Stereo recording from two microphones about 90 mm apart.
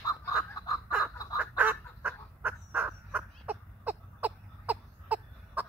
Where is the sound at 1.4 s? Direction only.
15° right (ahead or behind).